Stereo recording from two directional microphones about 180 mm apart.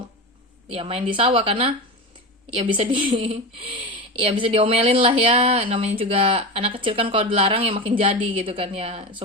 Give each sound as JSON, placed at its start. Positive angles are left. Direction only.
{"t": 0.7, "sound": "speech", "side_deg": -30}